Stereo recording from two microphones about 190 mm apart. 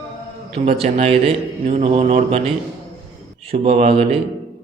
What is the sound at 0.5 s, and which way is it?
A man's voice, 35° right (ahead or behind).